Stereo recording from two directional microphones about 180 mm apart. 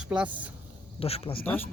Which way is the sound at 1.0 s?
35° left (ahead or behind).